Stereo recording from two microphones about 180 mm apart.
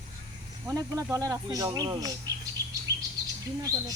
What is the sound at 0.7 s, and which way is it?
Speech, 20° right (ahead or behind).